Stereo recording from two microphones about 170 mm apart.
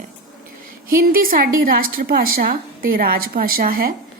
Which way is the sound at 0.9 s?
55° right (ahead or behind).